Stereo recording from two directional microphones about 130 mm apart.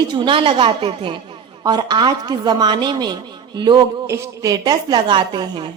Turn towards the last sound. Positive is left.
turn(degrees=-35)  # may be behind; listen again after turning